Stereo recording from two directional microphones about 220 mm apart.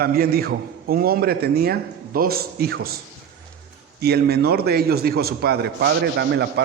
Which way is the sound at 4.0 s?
45° right (ahead or behind).